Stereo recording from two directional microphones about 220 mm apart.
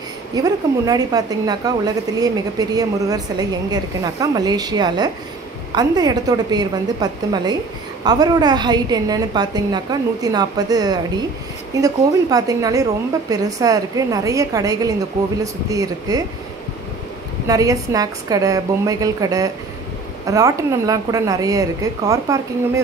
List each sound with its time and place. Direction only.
0.3 s a woman's voice: 15° right (ahead or behind)
17.5 s a woman's voice: 15° right (ahead or behind)